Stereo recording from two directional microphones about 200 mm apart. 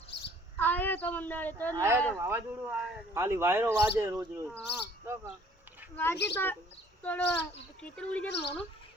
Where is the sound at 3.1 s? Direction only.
15° right (ahead or behind).